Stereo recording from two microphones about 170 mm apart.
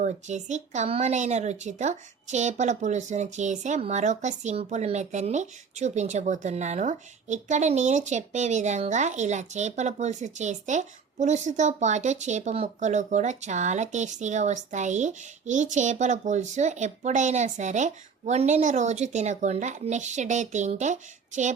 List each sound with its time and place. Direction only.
0.0 s a woman's voice: 45° right (ahead or behind)